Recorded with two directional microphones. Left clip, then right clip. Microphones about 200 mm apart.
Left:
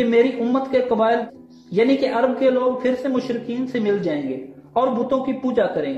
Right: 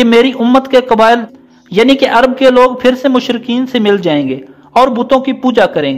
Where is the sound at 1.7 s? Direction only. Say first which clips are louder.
Right 10 dB; 20° right (ahead or behind).